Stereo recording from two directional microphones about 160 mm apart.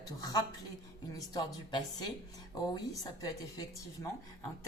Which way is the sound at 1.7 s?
25° left (ahead or behind).